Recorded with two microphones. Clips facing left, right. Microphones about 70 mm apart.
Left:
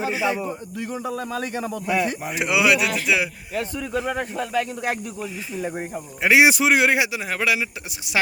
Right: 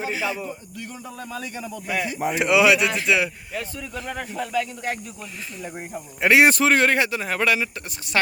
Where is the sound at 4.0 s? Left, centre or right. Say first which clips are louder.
Left 4 dB; centre.